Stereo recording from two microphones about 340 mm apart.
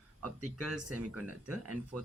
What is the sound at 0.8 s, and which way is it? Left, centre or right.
Speech, right.